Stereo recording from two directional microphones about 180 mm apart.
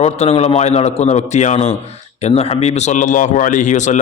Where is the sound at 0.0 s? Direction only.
35° left (ahead or behind).